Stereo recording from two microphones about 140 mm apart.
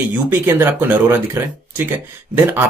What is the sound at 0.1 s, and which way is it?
Speech, 15° right (ahead or behind).